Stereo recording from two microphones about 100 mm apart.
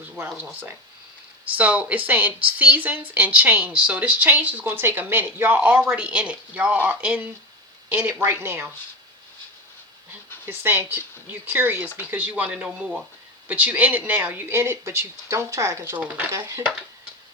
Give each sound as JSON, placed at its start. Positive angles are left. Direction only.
{"t": 0.1, "sound": "speech", "side_deg": -10}
{"t": 1.5, "sound": "speech", "side_deg": -15}
{"t": 10.4, "sound": "speech", "side_deg": -25}